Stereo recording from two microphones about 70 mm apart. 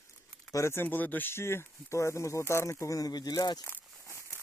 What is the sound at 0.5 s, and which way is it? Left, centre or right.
Speech, left.